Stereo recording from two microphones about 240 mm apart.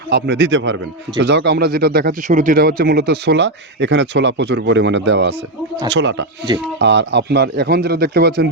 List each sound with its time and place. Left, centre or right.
0.1 s speech: right